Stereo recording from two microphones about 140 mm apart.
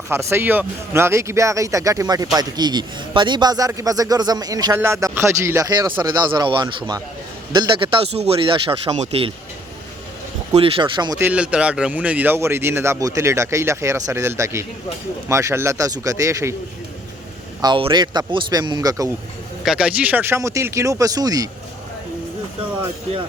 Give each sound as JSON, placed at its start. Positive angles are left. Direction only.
{"t": 0.1, "sound": "a man's voice", "side_deg": -20}
{"t": 10.5, "sound": "a man's voice", "side_deg": -40}
{"t": 11.2, "sound": "a man's voice", "side_deg": -10}
{"t": 17.6, "sound": "a man's voice", "side_deg": -35}
{"t": 19.6, "sound": "speech", "side_deg": -5}